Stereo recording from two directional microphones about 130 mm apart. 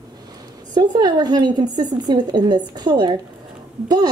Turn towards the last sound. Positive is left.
turn(degrees=-30)  # may be behind; listen again after turning